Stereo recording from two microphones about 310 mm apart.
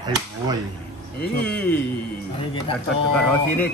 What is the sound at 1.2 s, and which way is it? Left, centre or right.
Speech, centre.